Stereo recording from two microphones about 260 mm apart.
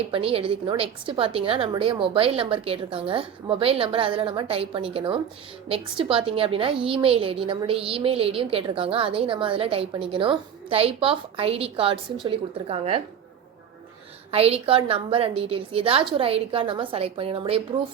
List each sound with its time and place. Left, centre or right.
0.1 s a woman's voice: right
14.3 s a woman's voice: right